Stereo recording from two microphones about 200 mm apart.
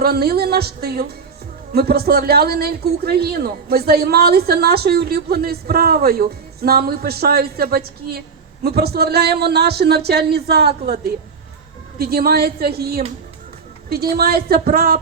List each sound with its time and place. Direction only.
0.0 s speech: 50° right (ahead or behind)
11.9 s speech: 50° right (ahead or behind)